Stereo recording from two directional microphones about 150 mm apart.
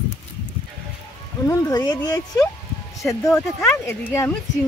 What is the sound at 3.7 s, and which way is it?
Speech, 15° left (ahead or behind).